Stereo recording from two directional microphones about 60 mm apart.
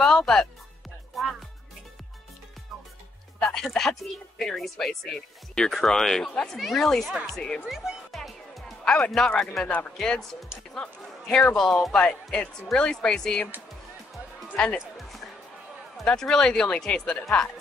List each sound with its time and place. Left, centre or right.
0.0 s music: centre
3.3 s speech: centre
7.6 s speech: centre
8.1 s music: centre
8.8 s speech: centre
9.7 s speech: left
14.5 s speech: centre
15.0 s music: centre
16.1 s speech: centre